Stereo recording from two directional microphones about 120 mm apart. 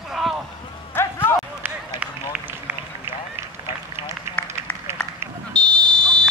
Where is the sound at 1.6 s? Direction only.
10° right (ahead or behind).